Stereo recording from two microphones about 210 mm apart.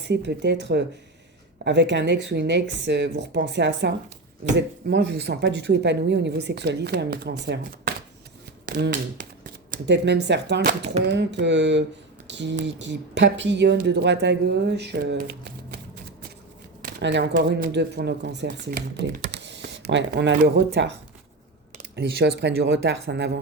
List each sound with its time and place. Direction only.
0.0 s speech: 55° right (ahead or behind)
8.6 s shuffling cards: 45° right (ahead or behind)
9.8 s speech: 55° right (ahead or behind)
17.0 s speech: 55° right (ahead or behind)
21.9 s speech: 50° right (ahead or behind)